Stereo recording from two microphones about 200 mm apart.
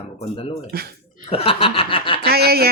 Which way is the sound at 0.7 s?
50° right (ahead or behind).